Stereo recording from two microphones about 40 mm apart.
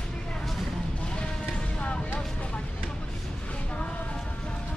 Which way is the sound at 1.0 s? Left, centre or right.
Left.